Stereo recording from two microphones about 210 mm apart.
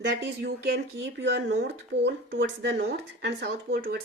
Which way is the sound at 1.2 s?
55° right (ahead or behind).